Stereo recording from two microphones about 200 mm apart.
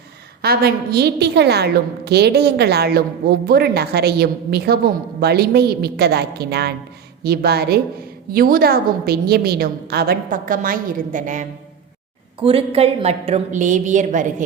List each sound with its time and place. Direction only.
0.4 s a woman's voice: 50° right (ahead or behind)
12.4 s a woman's voice: 25° right (ahead or behind)